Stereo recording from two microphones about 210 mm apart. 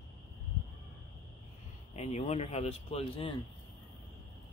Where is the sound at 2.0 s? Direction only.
30° left (ahead or behind).